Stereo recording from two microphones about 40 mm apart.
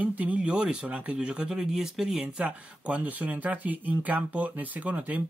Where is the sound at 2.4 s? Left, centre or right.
Right.